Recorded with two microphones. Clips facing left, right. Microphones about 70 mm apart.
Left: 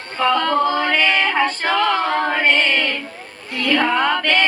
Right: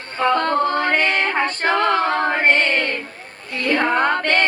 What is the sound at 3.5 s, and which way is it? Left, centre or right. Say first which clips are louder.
Female singing: left 1 dB; right.